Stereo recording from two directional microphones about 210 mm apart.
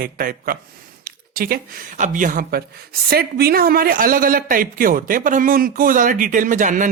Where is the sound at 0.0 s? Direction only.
45° right (ahead or behind).